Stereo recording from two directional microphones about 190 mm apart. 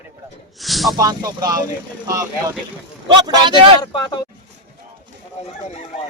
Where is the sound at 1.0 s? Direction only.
20° right (ahead or behind).